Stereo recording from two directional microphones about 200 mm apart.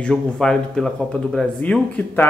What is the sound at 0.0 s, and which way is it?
Speech, 5° left (ahead or behind).